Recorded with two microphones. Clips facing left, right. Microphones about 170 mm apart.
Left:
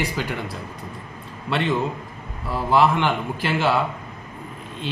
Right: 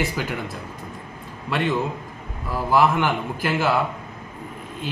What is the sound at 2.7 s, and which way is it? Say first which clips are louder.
A man's voice: even; 5° right (ahead or behind).